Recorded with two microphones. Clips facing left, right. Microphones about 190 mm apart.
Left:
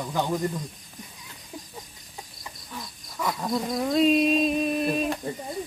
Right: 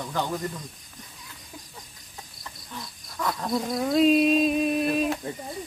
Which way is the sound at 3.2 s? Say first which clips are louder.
Even; 5° left (ahead or behind).